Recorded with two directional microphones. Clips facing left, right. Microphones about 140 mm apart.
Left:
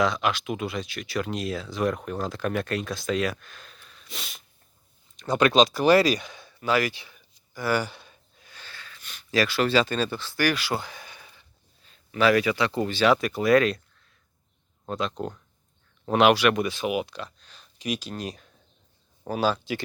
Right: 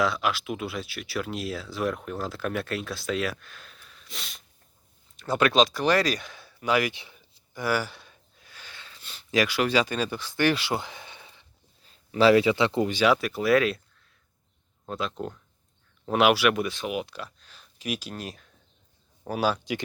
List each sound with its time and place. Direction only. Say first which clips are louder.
0.0 s speech: left 2 dB; 5° right (ahead or behind); by 7.6 s 25° right (ahead or behind)
7.6 s a sound: left 1 dB; 5° right (ahead or behind)
8.6 s wheeze: left 1 dB; 20° right (ahead or behind)
9.3 s speech: left 1 dB; 15° right (ahead or behind)
10.4 s speech: right 1 dB; 25° right (ahead or behind)
13.2 s speech: left 2 dB; centre (ahead or behind)
14.8 s speech: left 2 dB; 5° right (ahead or behind)
19.3 s speech: left 1 dB; 10° right (ahead or behind)